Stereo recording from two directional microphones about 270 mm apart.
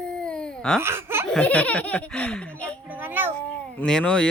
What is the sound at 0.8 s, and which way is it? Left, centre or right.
Speech, centre.